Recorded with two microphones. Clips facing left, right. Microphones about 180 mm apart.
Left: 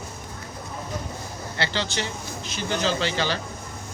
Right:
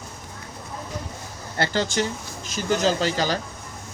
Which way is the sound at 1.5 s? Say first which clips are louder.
Right 5 dB; 45° right (ahead or behind).